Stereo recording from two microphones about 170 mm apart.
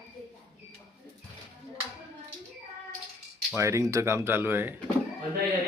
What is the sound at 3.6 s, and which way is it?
Speech, 15° right (ahead or behind).